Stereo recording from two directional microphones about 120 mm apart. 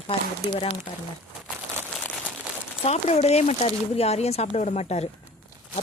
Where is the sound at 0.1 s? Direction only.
50° left (ahead or behind).